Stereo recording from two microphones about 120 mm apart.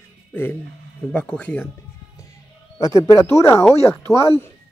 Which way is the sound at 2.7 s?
25° left (ahead or behind).